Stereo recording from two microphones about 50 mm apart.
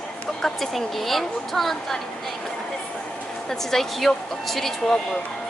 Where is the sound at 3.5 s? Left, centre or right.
Centre.